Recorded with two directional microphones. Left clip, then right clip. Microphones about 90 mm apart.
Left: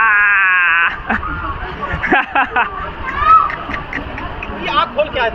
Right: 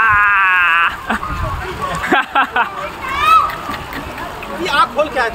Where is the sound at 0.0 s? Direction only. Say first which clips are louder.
Even; 15° right (ahead or behind).